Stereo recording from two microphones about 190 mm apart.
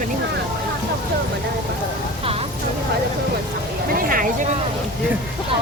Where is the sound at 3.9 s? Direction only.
50° right (ahead or behind).